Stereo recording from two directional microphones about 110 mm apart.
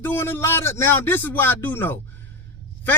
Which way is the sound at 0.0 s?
20° left (ahead or behind).